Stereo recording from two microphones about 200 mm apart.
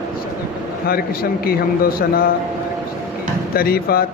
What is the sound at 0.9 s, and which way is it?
Speech, 50° left (ahead or behind).